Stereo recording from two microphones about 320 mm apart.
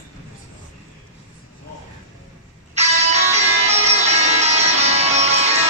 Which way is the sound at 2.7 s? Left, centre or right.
Centre.